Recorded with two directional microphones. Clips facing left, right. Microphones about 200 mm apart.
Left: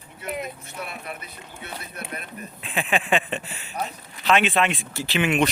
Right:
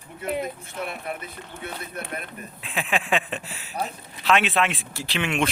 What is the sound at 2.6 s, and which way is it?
Speech, centre (ahead or behind).